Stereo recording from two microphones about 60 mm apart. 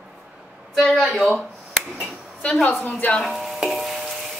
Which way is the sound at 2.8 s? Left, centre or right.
Left.